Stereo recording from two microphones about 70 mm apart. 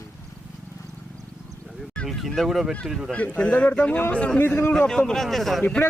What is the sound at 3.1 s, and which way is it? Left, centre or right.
Speech, centre.